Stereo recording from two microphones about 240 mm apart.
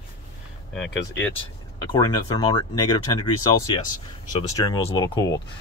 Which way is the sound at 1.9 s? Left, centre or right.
Centre.